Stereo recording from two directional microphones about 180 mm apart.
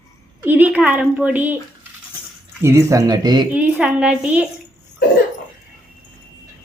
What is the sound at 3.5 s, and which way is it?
Speech, 10° right (ahead or behind).